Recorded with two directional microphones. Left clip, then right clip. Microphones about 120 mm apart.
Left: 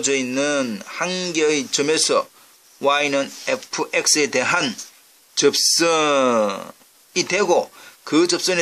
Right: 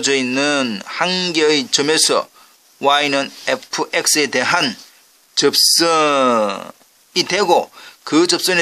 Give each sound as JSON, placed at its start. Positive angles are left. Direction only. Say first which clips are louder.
{"t": 0.0, "sound": "speech", "louder": "right 4 dB", "side_deg": -60}